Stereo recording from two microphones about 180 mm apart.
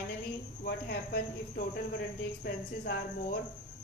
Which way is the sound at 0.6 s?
60° left (ahead or behind).